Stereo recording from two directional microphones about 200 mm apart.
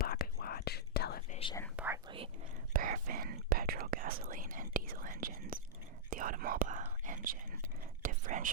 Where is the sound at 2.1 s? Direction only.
30° right (ahead or behind).